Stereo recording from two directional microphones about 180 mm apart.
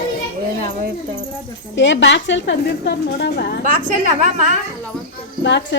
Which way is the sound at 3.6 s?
50° right (ahead or behind).